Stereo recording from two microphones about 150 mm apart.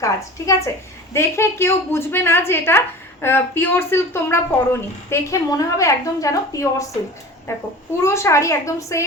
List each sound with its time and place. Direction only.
0.0 s a woman's voice: 20° left (ahead or behind)